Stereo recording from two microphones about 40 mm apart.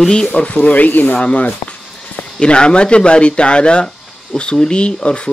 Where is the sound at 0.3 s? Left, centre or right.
Left.